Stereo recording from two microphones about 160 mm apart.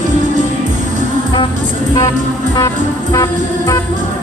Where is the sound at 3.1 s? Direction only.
20° left (ahead or behind).